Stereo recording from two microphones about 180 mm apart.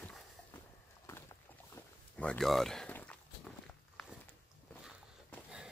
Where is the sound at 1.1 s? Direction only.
15° left (ahead or behind).